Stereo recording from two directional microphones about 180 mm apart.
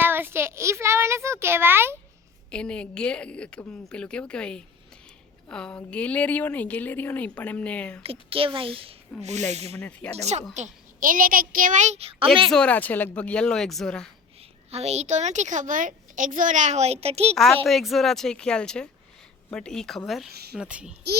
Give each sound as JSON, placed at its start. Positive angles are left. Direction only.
{"t": 0.0, "sound": "a child's voice", "side_deg": -10}
{"t": 2.5, "sound": "a woman's voice", "side_deg": 5}
{"t": 8.0, "sound": "a woman's voice", "side_deg": -30}
{"t": 9.7, "sound": "a woman's voice", "side_deg": 10}
{"t": 10.2, "sound": "a woman's voice", "side_deg": -40}
{"t": 12.5, "sound": "a woman's voice", "side_deg": 5}
{"t": 14.7, "sound": "a woman's voice", "side_deg": -35}
{"t": 17.3, "sound": "a woman's voice", "side_deg": 0}